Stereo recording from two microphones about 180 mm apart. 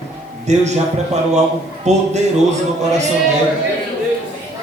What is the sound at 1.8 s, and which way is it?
Speech, 40° right (ahead or behind).